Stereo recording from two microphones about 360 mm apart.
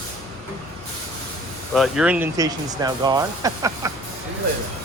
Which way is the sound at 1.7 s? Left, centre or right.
Centre.